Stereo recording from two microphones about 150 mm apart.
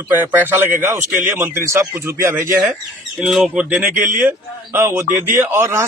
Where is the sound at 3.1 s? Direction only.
Centre (ahead or behind).